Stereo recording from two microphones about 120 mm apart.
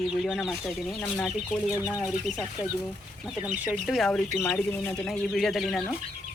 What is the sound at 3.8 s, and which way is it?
Speech, centre (ahead or behind).